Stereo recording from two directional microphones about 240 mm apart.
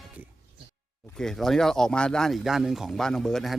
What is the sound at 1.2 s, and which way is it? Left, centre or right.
Speech, centre.